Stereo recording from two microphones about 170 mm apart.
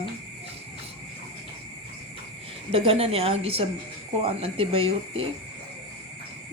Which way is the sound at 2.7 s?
35° right (ahead or behind).